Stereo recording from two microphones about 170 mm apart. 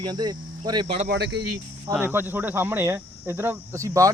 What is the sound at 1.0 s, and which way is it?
Speech, 90° right.